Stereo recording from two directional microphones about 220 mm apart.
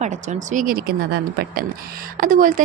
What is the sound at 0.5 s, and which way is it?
A woman's voice, 40° right (ahead or behind).